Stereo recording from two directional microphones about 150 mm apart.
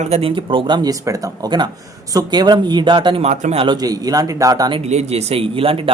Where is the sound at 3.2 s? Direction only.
45° right (ahead or behind).